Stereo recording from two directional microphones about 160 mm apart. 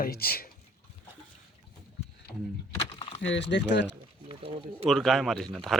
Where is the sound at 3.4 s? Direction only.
90° left.